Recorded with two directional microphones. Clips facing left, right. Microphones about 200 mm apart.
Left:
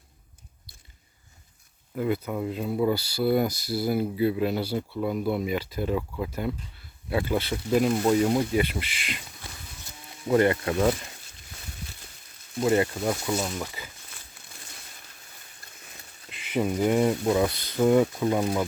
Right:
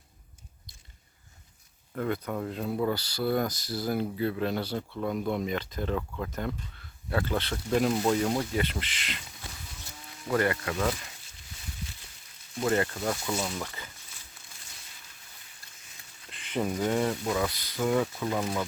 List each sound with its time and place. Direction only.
2.0 s speech: 5° left (ahead or behind)
8.2 s speech: 15° left (ahead or behind)
10.2 s speech: 25° left (ahead or behind)
12.6 s speech: 15° left (ahead or behind)
16.3 s a sound: 5° left (ahead or behind)
16.8 s speech: 15° left (ahead or behind)